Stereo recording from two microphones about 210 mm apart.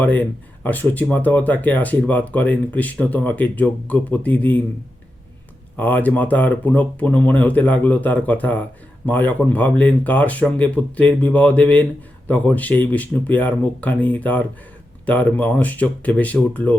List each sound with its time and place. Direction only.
0.0 s speech: 10° left (ahead or behind)
5.7 s speech: 10° left (ahead or behind)